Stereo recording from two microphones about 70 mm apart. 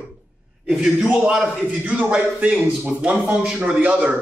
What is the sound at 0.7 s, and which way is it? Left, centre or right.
A man's voice, centre.